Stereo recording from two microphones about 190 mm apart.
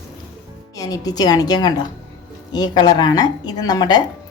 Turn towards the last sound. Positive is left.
turn(degrees=20)  # may be behind; listen again after turning